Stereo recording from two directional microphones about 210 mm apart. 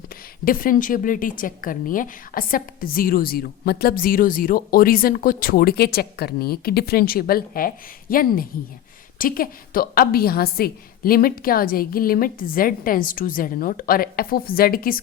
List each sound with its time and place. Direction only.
0.4 s a woman's voice: 40° left (ahead or behind)